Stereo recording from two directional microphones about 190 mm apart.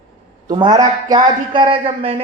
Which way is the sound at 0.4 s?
20° right (ahead or behind).